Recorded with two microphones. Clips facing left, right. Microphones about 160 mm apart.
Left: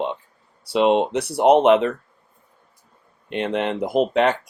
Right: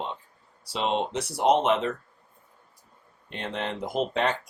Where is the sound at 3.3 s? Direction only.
70° left (ahead or behind).